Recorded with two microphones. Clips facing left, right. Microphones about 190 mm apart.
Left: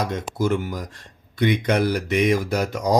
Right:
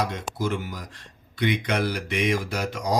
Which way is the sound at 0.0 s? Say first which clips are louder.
Left 4 dB; 45° left (ahead or behind).